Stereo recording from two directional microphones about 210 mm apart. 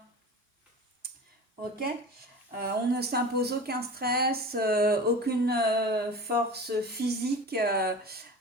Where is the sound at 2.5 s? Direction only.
50° right (ahead or behind).